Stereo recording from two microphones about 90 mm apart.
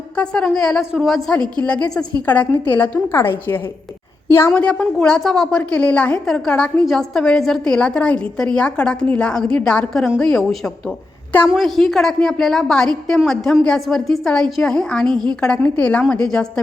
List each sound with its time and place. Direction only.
0.2 s a woman's voice: 10° left (ahead or behind)
1.6 s a woman's voice: 15° left (ahead or behind)
4.5 s a woman's voice: 15° left (ahead or behind)